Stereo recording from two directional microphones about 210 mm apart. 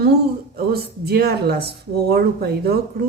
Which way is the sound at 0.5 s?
50° right (ahead or behind).